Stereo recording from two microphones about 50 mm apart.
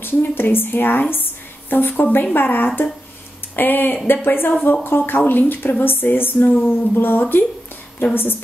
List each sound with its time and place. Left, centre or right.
0.0 s speech: left
1.1 s a sound: left
2.3 s speech: left